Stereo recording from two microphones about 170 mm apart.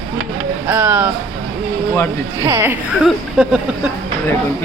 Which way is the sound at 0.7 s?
10° right (ahead or behind).